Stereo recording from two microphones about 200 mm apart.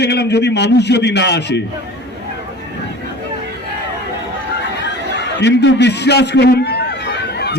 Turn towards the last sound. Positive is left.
turn(degrees=55)  # may be behind; listen again after turning